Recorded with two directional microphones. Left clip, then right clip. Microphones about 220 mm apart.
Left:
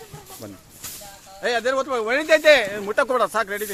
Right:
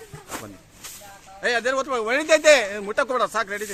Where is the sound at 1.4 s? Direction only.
20° left (ahead or behind).